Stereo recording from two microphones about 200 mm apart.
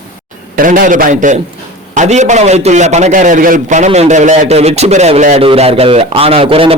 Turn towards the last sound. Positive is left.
turn(degrees=-25)  # may be behind; listen again after turning